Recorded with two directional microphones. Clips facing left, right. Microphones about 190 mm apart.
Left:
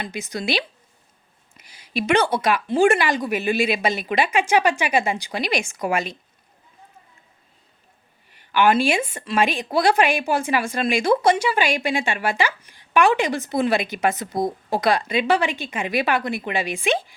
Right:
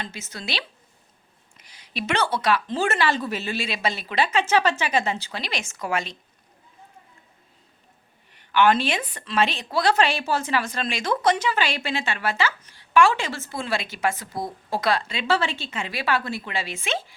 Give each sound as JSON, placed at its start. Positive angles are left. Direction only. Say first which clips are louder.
{"t": 0.0, "sound": "speech", "louder": "left 7 dB", "side_deg": 15}
{"t": 8.3, "sound": "speech", "louder": "left 1 dB", "side_deg": 10}